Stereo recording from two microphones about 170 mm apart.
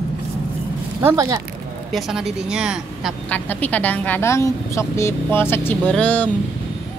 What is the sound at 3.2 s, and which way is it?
A woman's voice, 10° left (ahead or behind).